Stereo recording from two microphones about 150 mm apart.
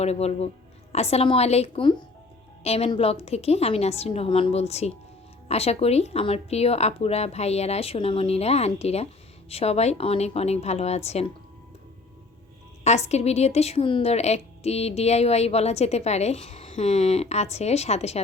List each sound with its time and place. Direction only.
0.0 s a woman's voice: 45° left (ahead or behind)
12.8 s a woman's voice: 45° left (ahead or behind)